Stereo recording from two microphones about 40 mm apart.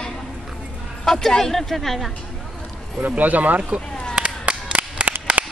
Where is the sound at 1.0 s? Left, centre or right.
Centre.